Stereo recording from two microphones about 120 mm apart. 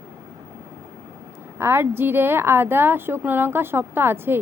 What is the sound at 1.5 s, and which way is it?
Speech, 20° right (ahead or behind).